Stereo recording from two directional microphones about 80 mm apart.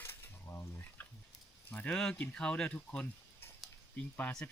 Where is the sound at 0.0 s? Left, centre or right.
Left.